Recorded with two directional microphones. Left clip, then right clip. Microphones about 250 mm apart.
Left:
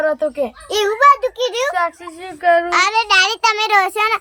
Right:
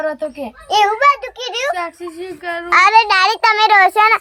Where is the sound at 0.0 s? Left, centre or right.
Centre.